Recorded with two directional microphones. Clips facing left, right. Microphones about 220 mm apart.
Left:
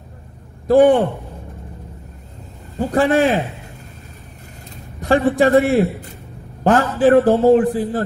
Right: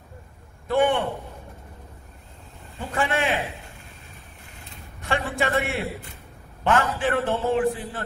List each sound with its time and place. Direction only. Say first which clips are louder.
0.7 s a man's voice: left 10 dB; 35° left (ahead or behind)
2.8 s a man's voice: left 10 dB; 35° left (ahead or behind)
5.0 s a man's voice: left 11 dB; 35° left (ahead or behind)